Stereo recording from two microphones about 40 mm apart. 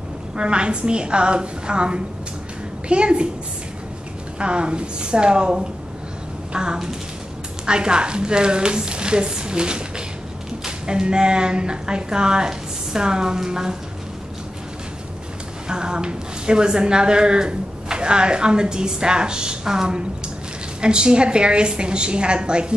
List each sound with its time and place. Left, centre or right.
0.4 s a woman's voice: right
4.4 s a woman's voice: right
15.7 s a woman's voice: right